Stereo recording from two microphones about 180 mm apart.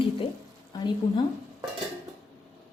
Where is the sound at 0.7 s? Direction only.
20° left (ahead or behind).